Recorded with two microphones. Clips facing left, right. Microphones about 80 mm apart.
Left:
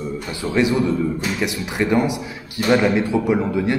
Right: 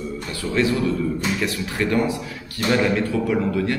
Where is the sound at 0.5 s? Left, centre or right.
Centre.